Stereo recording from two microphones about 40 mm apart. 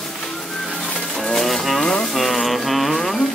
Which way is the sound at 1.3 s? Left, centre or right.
Centre.